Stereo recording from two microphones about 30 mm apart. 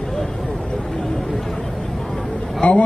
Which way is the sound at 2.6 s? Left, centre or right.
Left.